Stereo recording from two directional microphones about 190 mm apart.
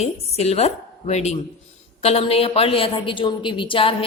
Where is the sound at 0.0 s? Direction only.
35° left (ahead or behind).